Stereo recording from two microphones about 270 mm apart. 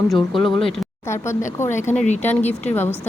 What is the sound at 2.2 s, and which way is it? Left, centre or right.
Speech, centre.